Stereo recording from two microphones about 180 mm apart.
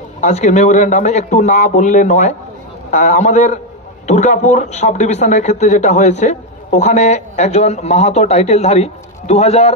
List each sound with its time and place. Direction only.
0.2 s speech: 40° left (ahead or behind)